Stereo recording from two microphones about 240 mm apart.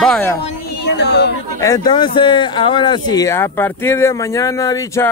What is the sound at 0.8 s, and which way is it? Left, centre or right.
Speech, left.